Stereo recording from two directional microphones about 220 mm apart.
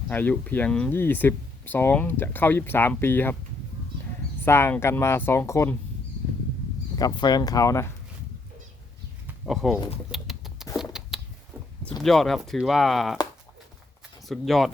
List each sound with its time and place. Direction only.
0.1 s speech: 10° left (ahead or behind)
4.4 s speech: 10° left (ahead or behind)
6.9 s speech: 15° left (ahead or behind)
9.2 s a sound: centre (ahead or behind)
10.1 s rodents: centre (ahead or behind)
11.1 s a sound: centre (ahead or behind)
12.0 s speech: centre (ahead or behind)
14.3 s speech: centre (ahead or behind)